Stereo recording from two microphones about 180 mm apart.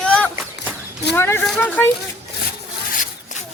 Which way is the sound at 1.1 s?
15° left (ahead or behind).